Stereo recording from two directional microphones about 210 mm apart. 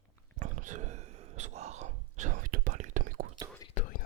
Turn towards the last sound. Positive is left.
turn(degrees=35)  # may be behind; listen again after turning